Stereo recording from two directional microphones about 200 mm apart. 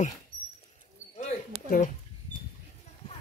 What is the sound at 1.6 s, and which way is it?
Speech, 40° left (ahead or behind).